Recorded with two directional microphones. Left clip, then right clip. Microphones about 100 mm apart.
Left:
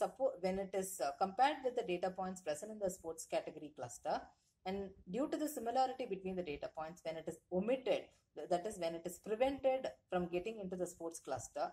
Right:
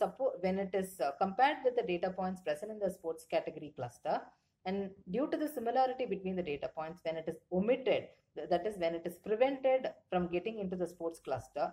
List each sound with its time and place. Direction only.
0.0 s a woman's voice: 40° left (ahead or behind)